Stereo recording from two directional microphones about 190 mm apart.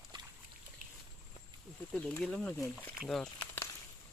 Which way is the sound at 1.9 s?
5° left (ahead or behind).